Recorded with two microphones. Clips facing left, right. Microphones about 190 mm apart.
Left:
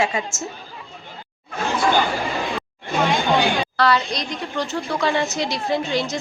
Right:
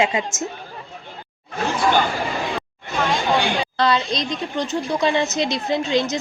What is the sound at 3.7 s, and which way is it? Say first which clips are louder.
Speech: right 2 dB; 20° right (ahead or behind).